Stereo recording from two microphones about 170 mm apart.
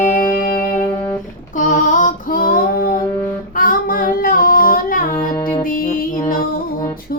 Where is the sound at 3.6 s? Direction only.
55° left (ahead or behind).